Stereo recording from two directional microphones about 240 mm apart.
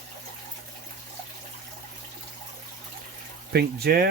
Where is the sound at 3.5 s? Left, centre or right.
Right.